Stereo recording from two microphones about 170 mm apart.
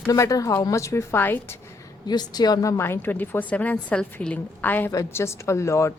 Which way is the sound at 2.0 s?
25° left (ahead or behind).